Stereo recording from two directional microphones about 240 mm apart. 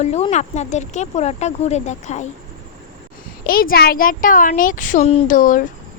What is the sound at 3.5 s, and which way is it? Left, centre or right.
Speech, left.